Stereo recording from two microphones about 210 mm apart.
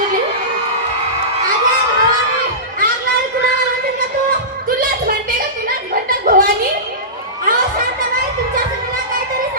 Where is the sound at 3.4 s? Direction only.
45° right (ahead or behind).